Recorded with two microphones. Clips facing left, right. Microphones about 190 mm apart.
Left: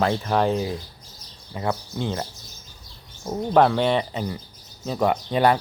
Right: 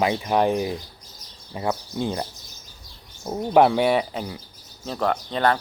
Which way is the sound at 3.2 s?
10° right (ahead or behind).